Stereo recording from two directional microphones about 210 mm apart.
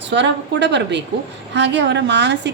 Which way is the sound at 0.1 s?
55° right (ahead or behind).